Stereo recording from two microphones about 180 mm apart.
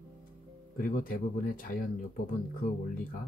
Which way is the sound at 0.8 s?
50° left (ahead or behind).